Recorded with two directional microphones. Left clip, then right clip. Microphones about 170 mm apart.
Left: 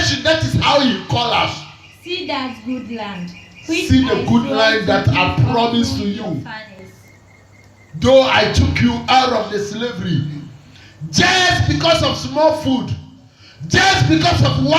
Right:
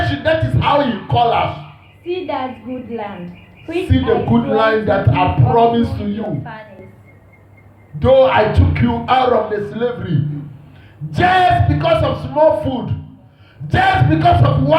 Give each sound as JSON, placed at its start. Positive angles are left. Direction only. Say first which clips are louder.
{"t": 0.0, "sound": "music", "louder": "left 1 dB", "side_deg": -45}
{"t": 2.0, "sound": "speech", "louder": "right 1 dB", "side_deg": -40}
{"t": 3.7, "sound": "speech", "louder": "even", "side_deg": -40}
{"t": 7.9, "sound": "speech", "louder": "right 1 dB", "side_deg": -40}